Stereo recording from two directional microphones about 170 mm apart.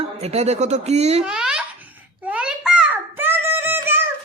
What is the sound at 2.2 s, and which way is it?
Music, 5° right (ahead or behind).